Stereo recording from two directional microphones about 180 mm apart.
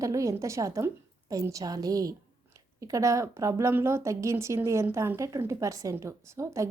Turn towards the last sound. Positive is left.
turn(degrees=-15)  # may be behind; listen again after turning